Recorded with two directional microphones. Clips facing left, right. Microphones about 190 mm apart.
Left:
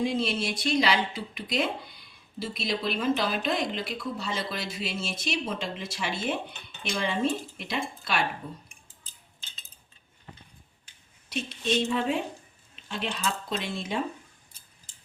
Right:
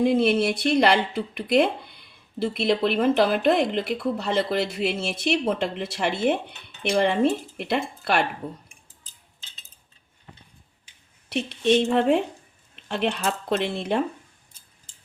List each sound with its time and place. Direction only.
0.0 s speech: 55° right (ahead or behind)
11.3 s speech: 65° right (ahead or behind)